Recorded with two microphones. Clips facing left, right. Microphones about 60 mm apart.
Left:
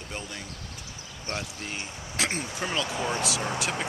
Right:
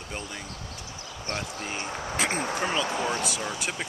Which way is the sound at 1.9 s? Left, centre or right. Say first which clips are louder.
Right 8 dB; right.